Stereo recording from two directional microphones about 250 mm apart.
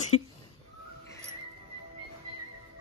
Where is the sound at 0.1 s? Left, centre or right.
Left.